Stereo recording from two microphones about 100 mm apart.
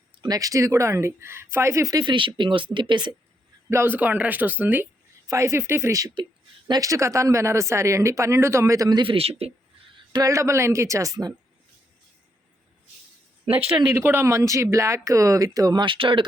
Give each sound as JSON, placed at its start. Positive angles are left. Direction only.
{"t": 0.2, "sound": "speech", "side_deg": -40}
{"t": 2.0, "sound": "speech", "side_deg": -55}
{"t": 3.7, "sound": "speech", "side_deg": -25}
{"t": 5.3, "sound": "speech", "side_deg": -30}
{"t": 9.0, "sound": "a man's voice", "side_deg": -65}
{"t": 10.1, "sound": "speech", "side_deg": -35}
{"t": 13.9, "sound": "speech", "side_deg": -25}
{"t": 15.8, "sound": "speech", "side_deg": -55}